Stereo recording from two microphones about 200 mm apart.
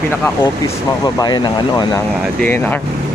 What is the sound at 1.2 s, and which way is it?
Speech, 20° left (ahead or behind).